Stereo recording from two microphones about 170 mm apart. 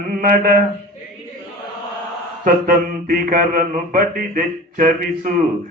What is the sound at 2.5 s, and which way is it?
Mantra, 55° right (ahead or behind).